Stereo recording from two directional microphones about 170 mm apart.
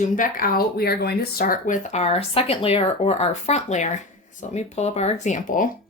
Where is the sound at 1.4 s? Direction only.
45° left (ahead or behind).